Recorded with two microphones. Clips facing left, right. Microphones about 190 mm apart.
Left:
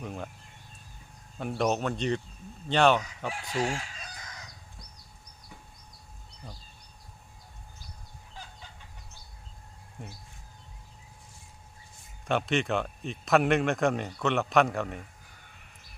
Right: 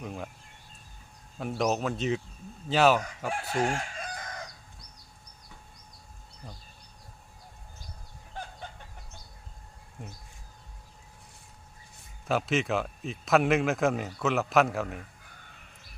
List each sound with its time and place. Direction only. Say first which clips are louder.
0.0 s speech: even; centre (ahead or behind)
1.4 s speech: even; centre (ahead or behind)
3.2 s chicken: right 3 dB; 55° right (ahead or behind)
8.3 s chicken: right 7 dB; 55° right (ahead or behind)
12.2 s speech: even; centre (ahead or behind)